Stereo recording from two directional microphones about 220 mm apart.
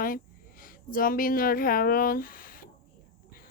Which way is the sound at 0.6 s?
40° left (ahead or behind).